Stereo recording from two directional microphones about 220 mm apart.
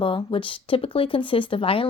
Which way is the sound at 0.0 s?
25° left (ahead or behind).